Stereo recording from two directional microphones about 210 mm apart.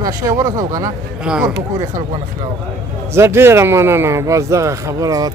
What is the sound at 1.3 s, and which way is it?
Speech, 5° right (ahead or behind).